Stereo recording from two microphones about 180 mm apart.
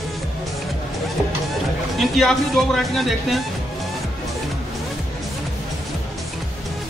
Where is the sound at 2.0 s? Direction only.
Centre (ahead or behind).